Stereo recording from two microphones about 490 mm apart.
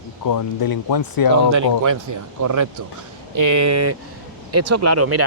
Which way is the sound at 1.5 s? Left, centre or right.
Right.